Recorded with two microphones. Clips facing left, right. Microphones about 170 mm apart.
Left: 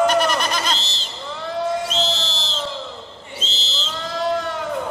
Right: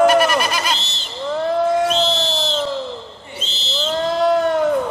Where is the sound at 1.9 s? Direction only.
60° right (ahead or behind).